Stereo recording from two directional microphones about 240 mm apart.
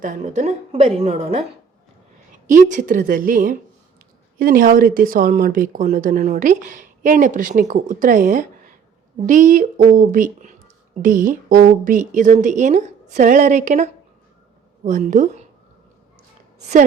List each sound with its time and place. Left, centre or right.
0.0 s a woman's voice: right
2.5 s speech: right